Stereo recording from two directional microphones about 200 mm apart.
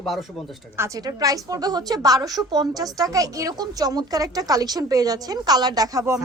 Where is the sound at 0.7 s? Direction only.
15° right (ahead or behind).